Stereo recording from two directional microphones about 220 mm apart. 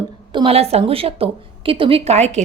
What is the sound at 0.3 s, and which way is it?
A woman's voice, 25° right (ahead or behind).